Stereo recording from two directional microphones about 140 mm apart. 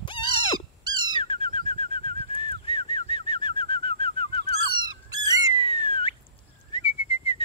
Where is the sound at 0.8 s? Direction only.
30° right (ahead or behind).